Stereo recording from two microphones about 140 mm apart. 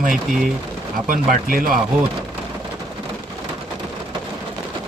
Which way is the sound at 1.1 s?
90° right.